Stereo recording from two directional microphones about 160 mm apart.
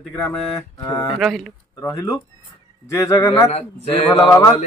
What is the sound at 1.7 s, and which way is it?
A man's voice, 20° left (ahead or behind).